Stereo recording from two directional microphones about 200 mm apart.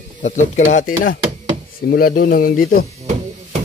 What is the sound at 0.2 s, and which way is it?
Speech, 40° left (ahead or behind).